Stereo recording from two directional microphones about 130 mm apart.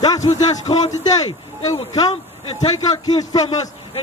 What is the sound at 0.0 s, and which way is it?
Speech, 30° left (ahead or behind).